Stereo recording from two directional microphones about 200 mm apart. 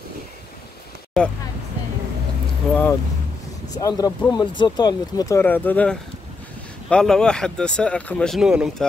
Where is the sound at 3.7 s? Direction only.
20° left (ahead or behind); by 8.8 s 5° right (ahead or behind).